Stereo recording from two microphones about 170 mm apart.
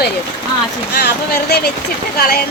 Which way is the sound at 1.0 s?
70° left (ahead or behind).